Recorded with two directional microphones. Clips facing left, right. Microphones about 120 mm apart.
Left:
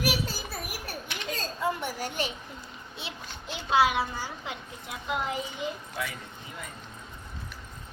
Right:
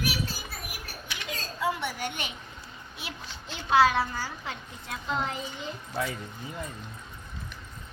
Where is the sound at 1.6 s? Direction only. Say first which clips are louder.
Right 1 dB; 40° left (ahead or behind).